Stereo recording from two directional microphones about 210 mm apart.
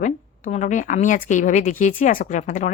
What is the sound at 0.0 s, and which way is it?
Speech, 35° left (ahead or behind).